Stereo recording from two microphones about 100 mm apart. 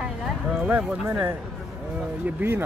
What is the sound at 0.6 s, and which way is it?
Speech, 15° right (ahead or behind).